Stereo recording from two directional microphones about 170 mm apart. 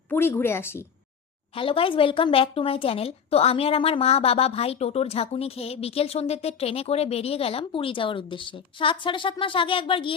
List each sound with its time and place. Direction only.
0.1 s speech: 10° left (ahead or behind)
1.5 s speech: 30° left (ahead or behind)